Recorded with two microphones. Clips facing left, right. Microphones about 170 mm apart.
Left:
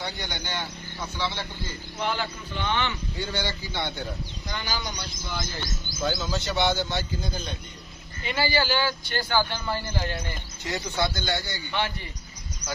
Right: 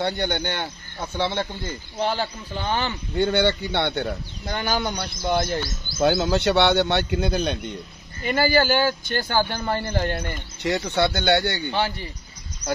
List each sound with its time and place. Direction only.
0.0 s a man's voice: 60° right (ahead or behind)
2.0 s a man's voice: 35° right (ahead or behind)
3.2 s a man's voice: 60° right (ahead or behind)
8.2 s a man's voice: 50° right (ahead or behind); by 11.7 s 70° right (ahead or behind)